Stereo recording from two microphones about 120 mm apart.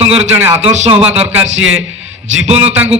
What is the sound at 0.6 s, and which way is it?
Speech, 65° right (ahead or behind).